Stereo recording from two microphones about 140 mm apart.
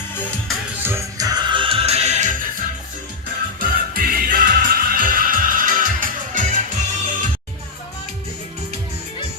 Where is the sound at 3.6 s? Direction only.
90° right; by 6.6 s 70° right (ahead or behind).